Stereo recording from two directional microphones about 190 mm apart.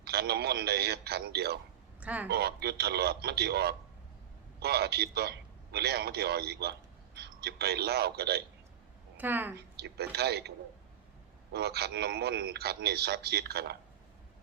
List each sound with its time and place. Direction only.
0.0 s speech: 55° right (ahead or behind)
2.0 s speech: 5° right (ahead or behind)
2.3 s speech: 55° right (ahead or behind)
9.1 s a woman's voice: 10° right (ahead or behind)
9.7 s speech: 55° right (ahead or behind)
11.5 s speech: 60° right (ahead or behind)